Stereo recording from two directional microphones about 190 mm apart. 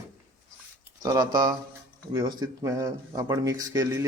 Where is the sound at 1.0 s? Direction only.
20° right (ahead or behind).